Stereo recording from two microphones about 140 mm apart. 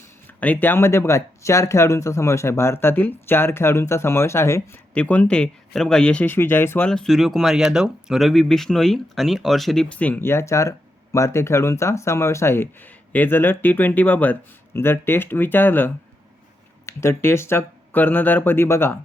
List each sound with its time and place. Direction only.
0.3 s speech: 10° left (ahead or behind)
6.9 s speech: 5° left (ahead or behind)